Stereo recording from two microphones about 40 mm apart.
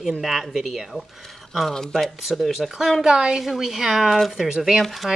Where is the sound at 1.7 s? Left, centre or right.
Centre.